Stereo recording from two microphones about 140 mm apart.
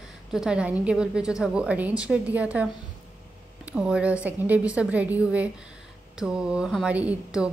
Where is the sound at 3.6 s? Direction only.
5° right (ahead or behind).